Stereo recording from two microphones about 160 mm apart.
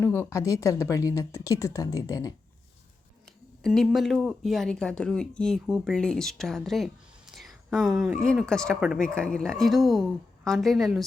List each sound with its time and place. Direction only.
0.0 s speech: 15° left (ahead or behind)
3.6 s speech: centre (ahead or behind)